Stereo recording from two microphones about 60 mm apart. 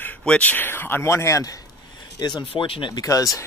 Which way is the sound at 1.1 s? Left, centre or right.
Left.